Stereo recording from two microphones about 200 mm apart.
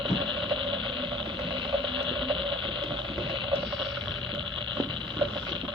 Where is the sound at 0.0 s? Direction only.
25° right (ahead or behind).